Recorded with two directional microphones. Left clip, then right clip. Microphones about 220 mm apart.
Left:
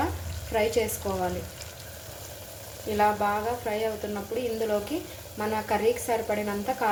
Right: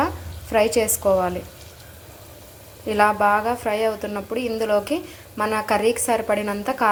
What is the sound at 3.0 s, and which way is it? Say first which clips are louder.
A woman's voice: right 7 dB; 25° right (ahead or behind).